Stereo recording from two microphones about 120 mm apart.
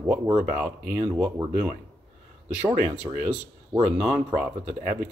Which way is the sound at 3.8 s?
10° right (ahead or behind).